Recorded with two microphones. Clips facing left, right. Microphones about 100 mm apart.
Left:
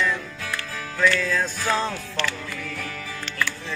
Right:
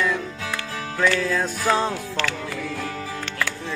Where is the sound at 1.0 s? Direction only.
15° right (ahead or behind).